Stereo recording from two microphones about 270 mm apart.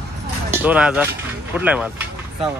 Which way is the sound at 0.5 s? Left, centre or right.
Centre.